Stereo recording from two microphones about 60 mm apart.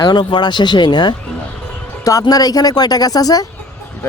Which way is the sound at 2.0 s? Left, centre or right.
Left.